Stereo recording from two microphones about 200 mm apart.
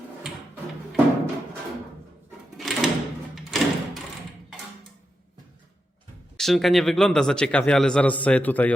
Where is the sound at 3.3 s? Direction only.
Centre (ahead or behind).